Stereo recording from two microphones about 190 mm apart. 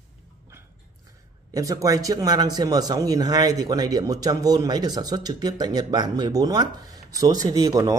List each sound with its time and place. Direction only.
1.5 s speech: 20° right (ahead or behind)